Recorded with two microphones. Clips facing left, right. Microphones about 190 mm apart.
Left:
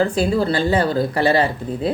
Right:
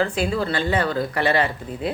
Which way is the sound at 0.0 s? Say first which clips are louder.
Left 4 dB; 35° left (ahead or behind).